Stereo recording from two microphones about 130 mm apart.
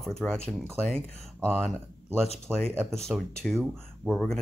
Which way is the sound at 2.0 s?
55° left (ahead or behind).